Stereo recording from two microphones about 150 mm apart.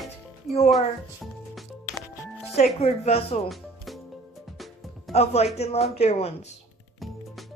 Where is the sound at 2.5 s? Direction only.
45° left (ahead or behind).